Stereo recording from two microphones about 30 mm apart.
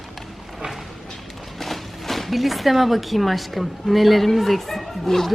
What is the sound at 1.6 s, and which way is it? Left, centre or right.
Speech, centre.